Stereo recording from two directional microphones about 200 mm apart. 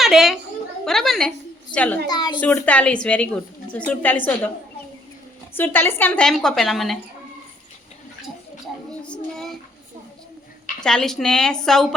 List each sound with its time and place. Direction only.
0.0 s a child's voice: centre (ahead or behind)
2.0 s a woman's voice: 20° left (ahead or behind)
2.4 s a woman's voice: 10° left (ahead or behind)
5.5 s a woman's voice: 10° left (ahead or behind)
9.0 s a woman's voice: 5° left (ahead or behind)
10.8 s a woman's voice: 5° left (ahead or behind)